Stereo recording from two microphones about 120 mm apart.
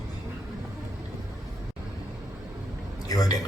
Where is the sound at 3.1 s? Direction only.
30° left (ahead or behind).